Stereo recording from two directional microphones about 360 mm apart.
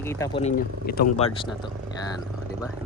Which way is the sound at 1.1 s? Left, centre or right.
Centre.